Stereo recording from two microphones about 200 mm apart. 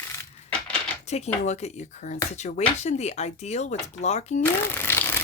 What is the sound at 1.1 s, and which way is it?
Speech, 35° left (ahead or behind).